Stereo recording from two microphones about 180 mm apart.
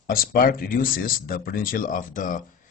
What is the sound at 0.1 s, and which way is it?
Speech, 55° left (ahead or behind).